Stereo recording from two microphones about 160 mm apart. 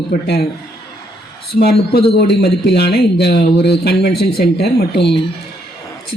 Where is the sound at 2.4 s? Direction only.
90° left.